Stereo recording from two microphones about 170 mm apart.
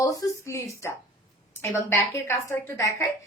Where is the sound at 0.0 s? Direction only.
20° left (ahead or behind).